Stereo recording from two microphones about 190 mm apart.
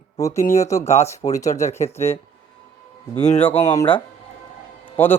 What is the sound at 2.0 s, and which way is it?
Speech, 35° left (ahead or behind).